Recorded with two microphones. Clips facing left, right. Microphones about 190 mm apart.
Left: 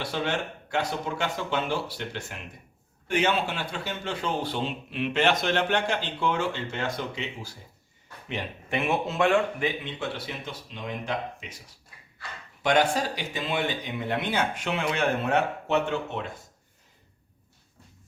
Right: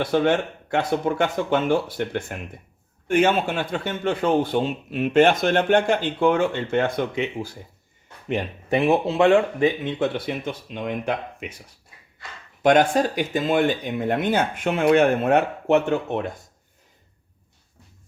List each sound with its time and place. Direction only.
0.0 s speech: 55° right (ahead or behind)
8.3 s speech: 35° right (ahead or behind)
9.8 s speech: 55° right (ahead or behind)
12.6 s speech: 50° right (ahead or behind)